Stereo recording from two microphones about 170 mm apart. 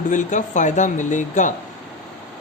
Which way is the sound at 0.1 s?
45° left (ahead or behind).